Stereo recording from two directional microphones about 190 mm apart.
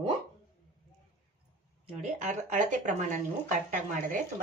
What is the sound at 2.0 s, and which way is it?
Speech, 40° right (ahead or behind).